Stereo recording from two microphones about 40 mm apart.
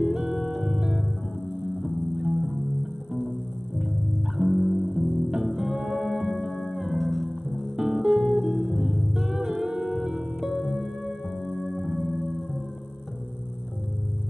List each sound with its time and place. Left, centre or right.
0.0 s music: centre
4.4 s music: centre
7.0 s music: centre
7.7 s music: centre